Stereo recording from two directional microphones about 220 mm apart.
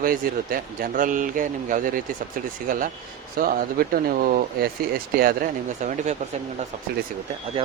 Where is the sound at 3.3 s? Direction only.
40° right (ahead or behind).